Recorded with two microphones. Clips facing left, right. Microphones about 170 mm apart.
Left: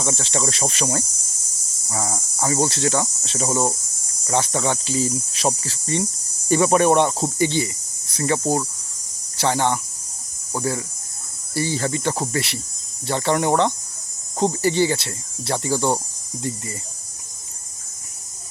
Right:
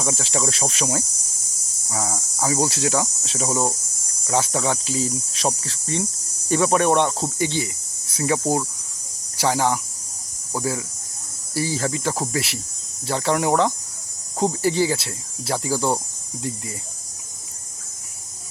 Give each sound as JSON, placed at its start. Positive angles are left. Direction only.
{"t": 0.0, "sound": "cricket", "side_deg": -5}
{"t": 8.1, "sound": "speech", "side_deg": -10}
{"t": 9.4, "sound": "cricket", "side_deg": -5}